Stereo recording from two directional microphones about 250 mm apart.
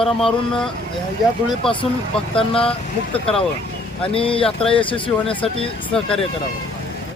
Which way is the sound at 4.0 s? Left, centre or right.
Left.